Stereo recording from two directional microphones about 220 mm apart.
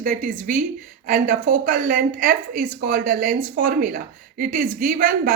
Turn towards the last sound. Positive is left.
turn(degrees=-35)  # may be behind; listen again after turning